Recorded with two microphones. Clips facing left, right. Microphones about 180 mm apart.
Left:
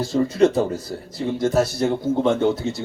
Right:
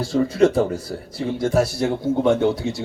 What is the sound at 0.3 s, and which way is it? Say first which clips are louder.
Speech: even; 20° left (ahead or behind).